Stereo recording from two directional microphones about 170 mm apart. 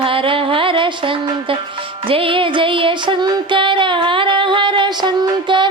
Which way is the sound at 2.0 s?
30° right (ahead or behind).